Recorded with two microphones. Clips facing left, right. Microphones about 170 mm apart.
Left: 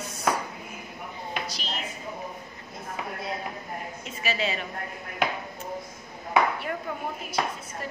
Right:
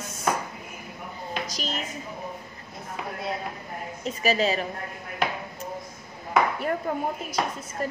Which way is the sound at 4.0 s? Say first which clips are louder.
Right 7 dB; 40° right (ahead or behind).